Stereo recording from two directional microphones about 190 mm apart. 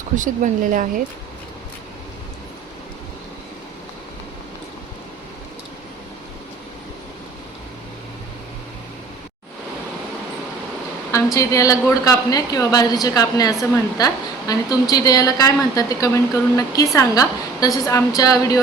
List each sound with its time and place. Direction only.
0.2 s speech: 45° right (ahead or behind)
11.1 s a woman's voice: 15° left (ahead or behind)